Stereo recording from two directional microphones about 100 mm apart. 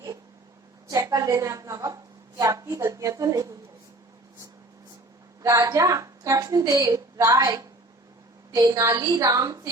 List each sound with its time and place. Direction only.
0.9 s a woman's voice: 35° right (ahead or behind)
5.4 s a woman's voice: 40° right (ahead or behind)